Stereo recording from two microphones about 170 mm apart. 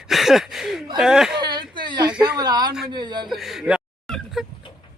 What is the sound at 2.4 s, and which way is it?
Speech, 25° right (ahead or behind).